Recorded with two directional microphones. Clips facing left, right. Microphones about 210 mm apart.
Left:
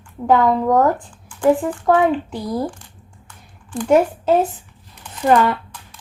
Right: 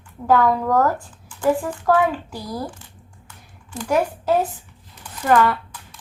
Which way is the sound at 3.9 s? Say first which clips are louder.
Left 5 dB; 25° left (ahead or behind).